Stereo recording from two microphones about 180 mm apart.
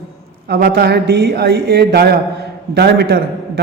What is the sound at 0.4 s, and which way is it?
A man's voice, 60° right (ahead or behind).